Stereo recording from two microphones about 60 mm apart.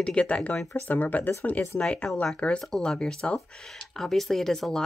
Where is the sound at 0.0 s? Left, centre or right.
Centre.